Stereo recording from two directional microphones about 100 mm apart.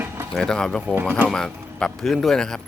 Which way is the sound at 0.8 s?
20° right (ahead or behind).